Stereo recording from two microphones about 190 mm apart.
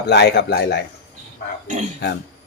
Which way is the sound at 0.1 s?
60° left (ahead or behind).